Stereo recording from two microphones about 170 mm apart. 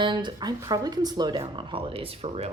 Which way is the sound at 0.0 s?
30° right (ahead or behind).